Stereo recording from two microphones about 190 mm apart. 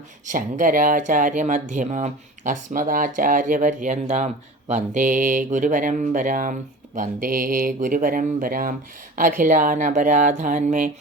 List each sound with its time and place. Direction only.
0.3 s speech: 45° right (ahead or behind)